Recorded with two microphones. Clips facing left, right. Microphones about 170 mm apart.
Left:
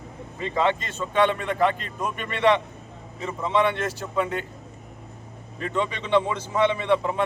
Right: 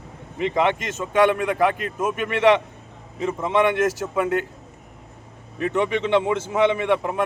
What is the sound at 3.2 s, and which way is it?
Speech, 15° right (ahead or behind).